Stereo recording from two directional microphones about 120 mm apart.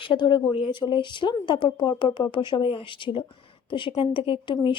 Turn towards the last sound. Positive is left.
turn(degrees=45)  # may be behind; listen again after turning